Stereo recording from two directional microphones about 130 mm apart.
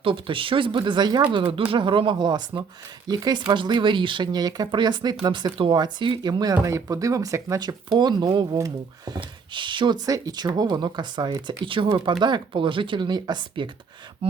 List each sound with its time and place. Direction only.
0.0 s speech: 40° right (ahead or behind)
14.2 s speech: 50° right (ahead or behind)